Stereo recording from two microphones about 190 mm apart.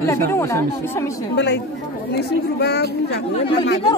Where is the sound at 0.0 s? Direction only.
15° left (ahead or behind).